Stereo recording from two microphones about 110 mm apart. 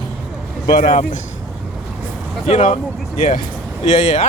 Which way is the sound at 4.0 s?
85° left.